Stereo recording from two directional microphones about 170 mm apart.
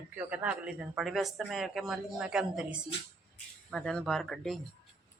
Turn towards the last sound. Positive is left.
turn(degrees=5)  # may be behind; listen again after turning